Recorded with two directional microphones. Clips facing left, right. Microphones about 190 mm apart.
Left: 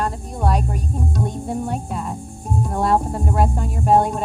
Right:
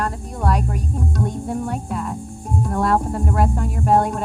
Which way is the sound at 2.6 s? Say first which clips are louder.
Even; 20° left (ahead or behind).